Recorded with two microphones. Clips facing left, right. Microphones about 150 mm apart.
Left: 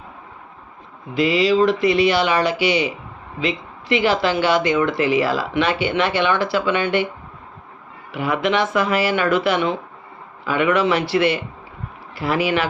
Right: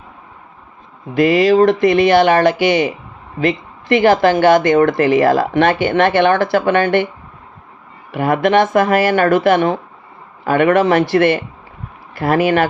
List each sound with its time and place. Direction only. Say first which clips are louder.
1.1 s speech: right 5 dB; 50° right (ahead or behind)
8.1 s speech: right 7 dB; 50° right (ahead or behind)